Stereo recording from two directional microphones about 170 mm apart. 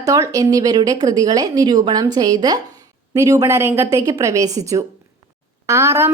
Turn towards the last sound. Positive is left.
turn(degrees=-15)  # may be behind; listen again after turning